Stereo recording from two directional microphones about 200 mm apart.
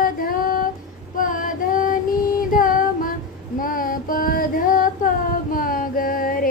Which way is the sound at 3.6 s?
45° left (ahead or behind).